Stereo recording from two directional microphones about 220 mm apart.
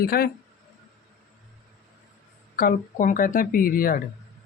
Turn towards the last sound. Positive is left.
turn(degrees=40)  # may be behind; listen again after turning